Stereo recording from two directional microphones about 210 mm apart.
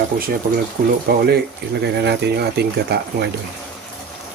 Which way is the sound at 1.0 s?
50° right (ahead or behind).